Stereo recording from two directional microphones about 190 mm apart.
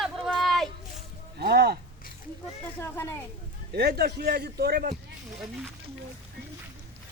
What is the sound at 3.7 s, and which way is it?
Speech, 55° right (ahead or behind).